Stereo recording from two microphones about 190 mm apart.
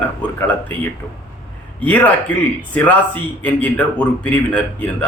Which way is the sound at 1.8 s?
10° left (ahead or behind).